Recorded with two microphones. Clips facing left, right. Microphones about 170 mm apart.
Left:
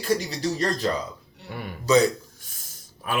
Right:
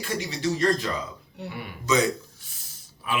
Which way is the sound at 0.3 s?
40° left (ahead or behind).